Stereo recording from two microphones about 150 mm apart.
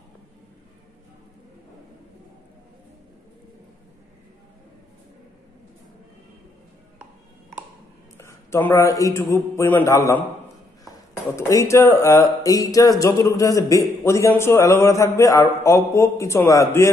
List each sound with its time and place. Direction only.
8.2 s a man's voice: 20° left (ahead or behind)
11.3 s speech: 20° left (ahead or behind)